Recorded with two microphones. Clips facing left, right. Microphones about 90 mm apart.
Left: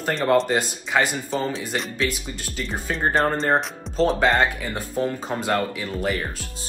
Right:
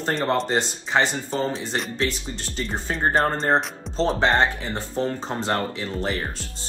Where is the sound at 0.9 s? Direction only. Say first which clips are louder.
Left 1 dB; 30° right (ahead or behind).